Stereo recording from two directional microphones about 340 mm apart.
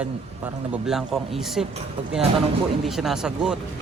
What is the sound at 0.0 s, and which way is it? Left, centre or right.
Speech, centre.